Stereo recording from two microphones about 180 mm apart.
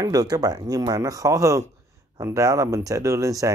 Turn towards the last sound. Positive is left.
turn(degrees=-20)  # may be behind; listen again after turning